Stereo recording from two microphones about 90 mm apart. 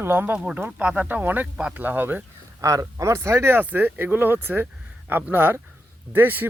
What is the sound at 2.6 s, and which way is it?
Speech, 35° right (ahead or behind).